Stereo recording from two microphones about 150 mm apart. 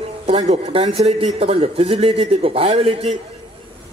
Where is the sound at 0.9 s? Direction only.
40° right (ahead or behind).